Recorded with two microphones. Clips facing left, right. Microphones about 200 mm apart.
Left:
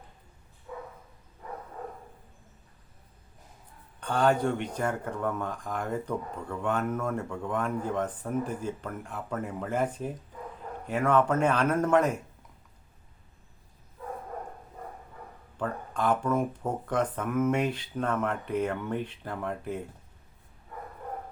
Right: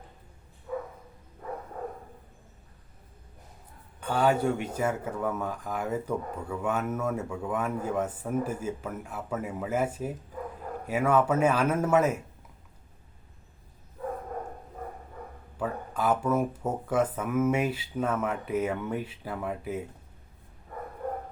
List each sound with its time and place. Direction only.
4.0 s speech: 5° right (ahead or behind)
15.5 s speech: 5° right (ahead or behind)